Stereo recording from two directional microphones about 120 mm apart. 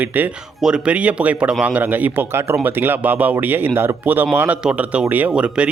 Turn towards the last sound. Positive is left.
turn(degrees=-10)  # may be behind; listen again after turning